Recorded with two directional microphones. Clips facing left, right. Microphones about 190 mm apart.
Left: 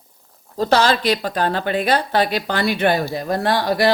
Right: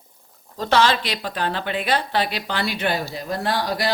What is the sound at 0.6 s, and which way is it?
A woman's voice, 40° left (ahead or behind).